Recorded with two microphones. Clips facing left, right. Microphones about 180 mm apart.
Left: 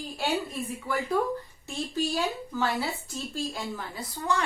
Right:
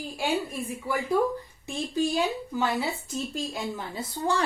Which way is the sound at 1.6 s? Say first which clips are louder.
Right 3 dB; 15° right (ahead or behind).